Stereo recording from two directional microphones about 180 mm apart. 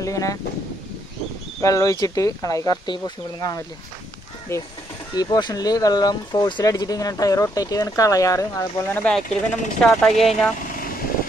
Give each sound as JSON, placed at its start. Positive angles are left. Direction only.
{"t": 0.0, "sound": "speech", "side_deg": 20}
{"t": 1.6, "sound": "speech", "side_deg": 20}